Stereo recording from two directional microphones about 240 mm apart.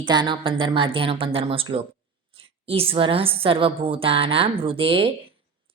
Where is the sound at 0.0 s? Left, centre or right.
Centre.